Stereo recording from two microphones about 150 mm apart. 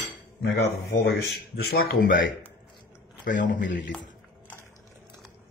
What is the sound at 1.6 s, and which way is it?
Speech, 75° left (ahead or behind).